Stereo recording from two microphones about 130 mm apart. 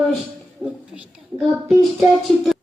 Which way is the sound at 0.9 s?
55° left (ahead or behind).